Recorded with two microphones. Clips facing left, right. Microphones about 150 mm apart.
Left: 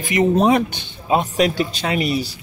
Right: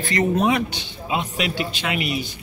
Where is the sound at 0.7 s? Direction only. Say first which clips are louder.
Left 6 dB; 50° left (ahead or behind).